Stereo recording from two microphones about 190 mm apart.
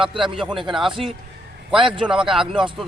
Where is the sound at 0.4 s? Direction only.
25° right (ahead or behind).